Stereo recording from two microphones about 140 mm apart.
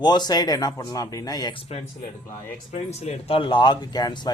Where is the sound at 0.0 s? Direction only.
30° left (ahead or behind).